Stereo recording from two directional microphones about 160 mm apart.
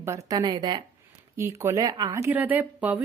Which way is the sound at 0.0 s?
20° right (ahead or behind).